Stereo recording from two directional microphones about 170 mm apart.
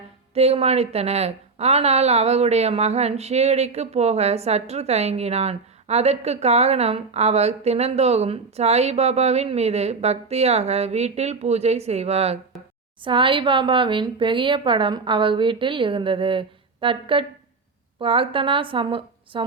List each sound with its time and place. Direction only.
0.3 s a woman's voice: 35° right (ahead or behind)